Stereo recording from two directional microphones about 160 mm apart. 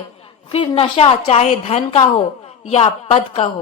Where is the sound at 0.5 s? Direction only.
35° left (ahead or behind).